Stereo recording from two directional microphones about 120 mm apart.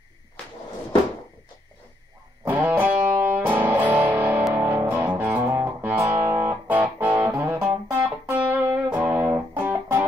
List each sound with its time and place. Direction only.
2.4 s music: 15° right (ahead or behind)